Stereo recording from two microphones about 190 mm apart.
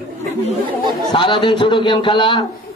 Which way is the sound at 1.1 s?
25° left (ahead or behind).